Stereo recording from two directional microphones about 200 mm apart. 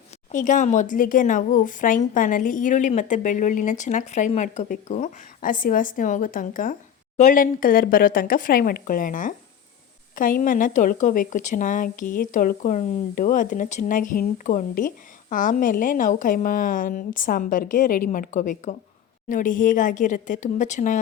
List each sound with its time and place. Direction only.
0.3 s a woman's voice: 40° left (ahead or behind)